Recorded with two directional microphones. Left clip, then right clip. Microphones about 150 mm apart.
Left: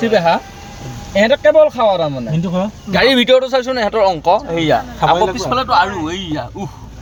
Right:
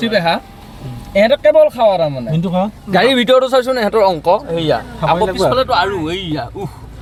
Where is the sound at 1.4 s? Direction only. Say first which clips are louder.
Even; 15° right (ahead or behind).